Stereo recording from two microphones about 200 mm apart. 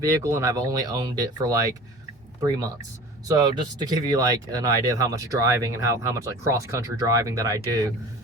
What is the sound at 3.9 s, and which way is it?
Speech, 20° right (ahead or behind).